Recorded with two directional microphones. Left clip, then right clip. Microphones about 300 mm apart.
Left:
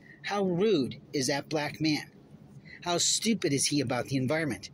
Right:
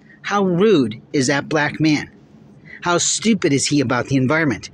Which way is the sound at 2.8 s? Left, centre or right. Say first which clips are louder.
Right 10 dB; left.